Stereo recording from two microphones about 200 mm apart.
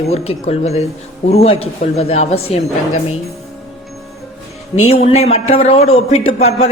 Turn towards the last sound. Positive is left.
turn(degrees=30)  # may be behind; listen again after turning